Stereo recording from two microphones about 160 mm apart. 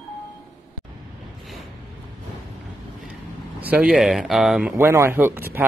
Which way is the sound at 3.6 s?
5° right (ahead or behind).